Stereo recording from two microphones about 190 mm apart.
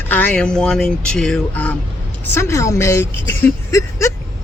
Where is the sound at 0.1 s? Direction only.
5° left (ahead or behind).